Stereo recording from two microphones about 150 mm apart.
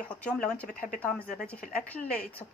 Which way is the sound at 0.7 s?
70° left (ahead or behind).